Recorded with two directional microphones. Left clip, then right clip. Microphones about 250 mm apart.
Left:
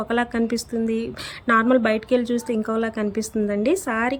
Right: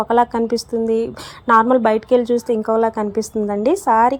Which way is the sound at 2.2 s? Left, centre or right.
Centre.